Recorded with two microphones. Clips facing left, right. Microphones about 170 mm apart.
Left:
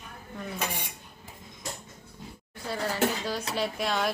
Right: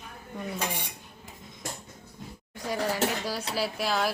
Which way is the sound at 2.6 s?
10° right (ahead or behind).